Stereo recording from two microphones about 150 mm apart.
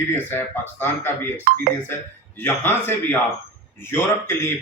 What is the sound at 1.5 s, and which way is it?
Speech, 80° right.